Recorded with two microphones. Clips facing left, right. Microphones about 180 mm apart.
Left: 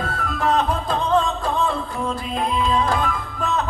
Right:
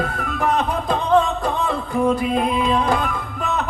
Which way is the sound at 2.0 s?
60° right (ahead or behind).